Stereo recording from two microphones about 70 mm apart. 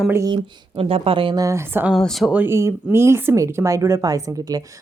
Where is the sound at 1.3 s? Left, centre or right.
Right.